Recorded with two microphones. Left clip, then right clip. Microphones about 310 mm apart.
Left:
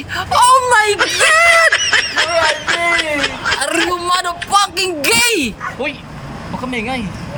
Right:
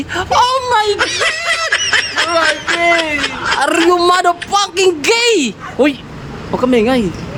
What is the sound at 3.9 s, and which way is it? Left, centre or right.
Speech, centre.